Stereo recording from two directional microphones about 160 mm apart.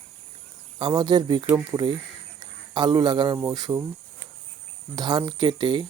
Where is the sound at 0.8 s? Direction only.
30° right (ahead or behind).